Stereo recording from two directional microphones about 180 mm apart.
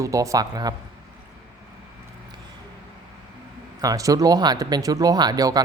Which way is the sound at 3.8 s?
20° right (ahead or behind).